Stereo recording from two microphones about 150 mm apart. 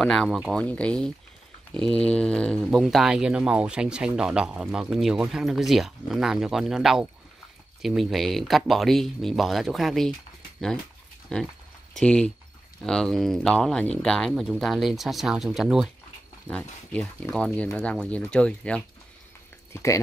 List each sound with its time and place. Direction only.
0.0 s speech: 5° left (ahead or behind)
11.3 s speech: 5° left (ahead or behind)
19.7 s speech: 20° left (ahead or behind)